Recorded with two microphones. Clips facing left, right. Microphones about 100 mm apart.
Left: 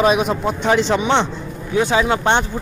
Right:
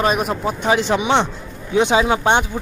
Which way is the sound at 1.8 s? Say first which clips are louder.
Right 1 dB; 20° right (ahead or behind).